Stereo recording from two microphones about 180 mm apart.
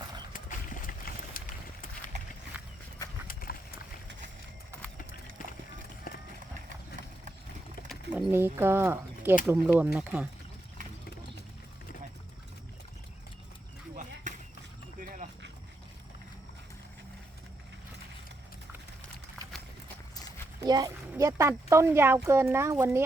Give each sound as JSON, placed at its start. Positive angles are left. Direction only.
{"t": 0.0, "sound": "mechanisms", "side_deg": -25}
{"t": 0.3, "sound": "a sound", "side_deg": 50}
{"t": 2.5, "sound": "horse", "side_deg": -10}
{"t": 3.2, "sound": "horse", "side_deg": 50}
{"t": 6.1, "sound": "run", "side_deg": 55}
{"t": 7.9, "sound": "speech", "side_deg": -10}
{"t": 14.3, "sound": "horse", "side_deg": -45}
{"t": 14.9, "sound": "a sound", "side_deg": -50}
{"t": 20.6, "sound": "horse", "side_deg": -20}
{"t": 21.2, "sound": "speech", "side_deg": -20}